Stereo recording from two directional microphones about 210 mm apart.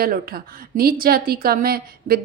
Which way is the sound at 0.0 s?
45° right (ahead or behind).